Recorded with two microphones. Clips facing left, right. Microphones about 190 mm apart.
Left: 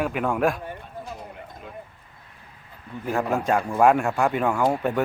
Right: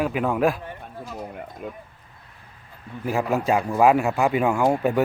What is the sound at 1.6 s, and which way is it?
Speech, 50° right (ahead or behind).